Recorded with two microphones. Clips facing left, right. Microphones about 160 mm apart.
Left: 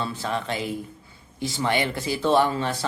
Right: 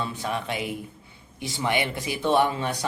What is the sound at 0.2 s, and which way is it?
Speech, 15° right (ahead or behind).